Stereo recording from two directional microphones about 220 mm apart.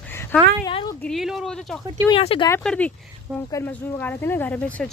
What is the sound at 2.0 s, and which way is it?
Speech, 25° left (ahead or behind).